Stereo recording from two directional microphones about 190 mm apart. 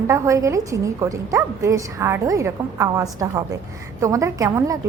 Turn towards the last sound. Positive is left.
turn(degrees=-15)  # may be behind; listen again after turning